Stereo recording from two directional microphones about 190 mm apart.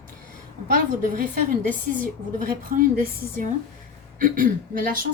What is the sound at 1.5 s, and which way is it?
A woman's voice, 45° right (ahead or behind).